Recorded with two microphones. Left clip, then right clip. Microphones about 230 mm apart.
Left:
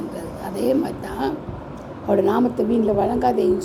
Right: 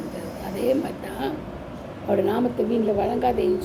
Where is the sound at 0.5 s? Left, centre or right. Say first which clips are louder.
Left 2 dB; left.